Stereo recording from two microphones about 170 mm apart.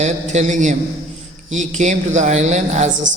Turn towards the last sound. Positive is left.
turn(degrees=-45)  # may be behind; listen again after turning